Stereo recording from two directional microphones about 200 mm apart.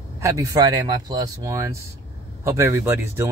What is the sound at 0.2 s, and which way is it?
Speech, 15° right (ahead or behind).